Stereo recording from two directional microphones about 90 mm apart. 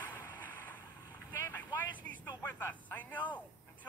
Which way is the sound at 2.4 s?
20° left (ahead or behind).